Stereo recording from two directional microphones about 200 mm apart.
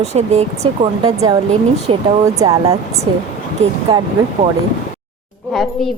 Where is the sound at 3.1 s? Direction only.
25° right (ahead or behind).